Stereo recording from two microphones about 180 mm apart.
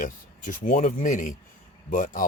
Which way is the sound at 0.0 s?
45° left (ahead or behind).